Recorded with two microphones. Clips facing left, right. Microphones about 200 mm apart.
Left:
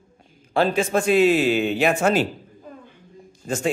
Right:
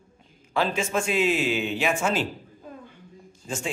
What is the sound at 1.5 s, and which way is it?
Speech, 60° left (ahead or behind).